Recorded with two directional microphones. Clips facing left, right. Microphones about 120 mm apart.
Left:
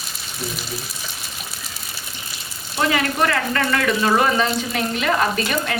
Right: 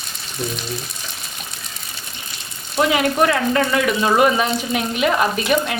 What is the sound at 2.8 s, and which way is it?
Speech, 15° right (ahead or behind).